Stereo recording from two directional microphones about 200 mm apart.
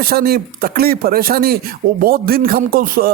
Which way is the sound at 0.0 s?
50° right (ahead or behind).